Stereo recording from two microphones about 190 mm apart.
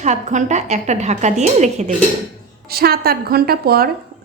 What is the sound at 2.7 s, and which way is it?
A woman's voice, 55° right (ahead or behind).